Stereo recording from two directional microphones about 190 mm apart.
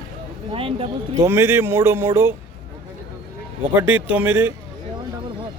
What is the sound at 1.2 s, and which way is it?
Speech, 15° right (ahead or behind).